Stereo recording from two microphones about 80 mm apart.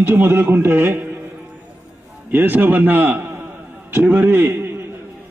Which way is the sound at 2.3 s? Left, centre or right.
Right.